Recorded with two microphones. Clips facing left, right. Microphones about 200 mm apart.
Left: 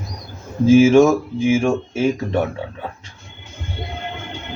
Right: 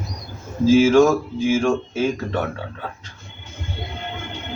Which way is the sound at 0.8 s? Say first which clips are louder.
Left 2 dB; 25° left (ahead or behind).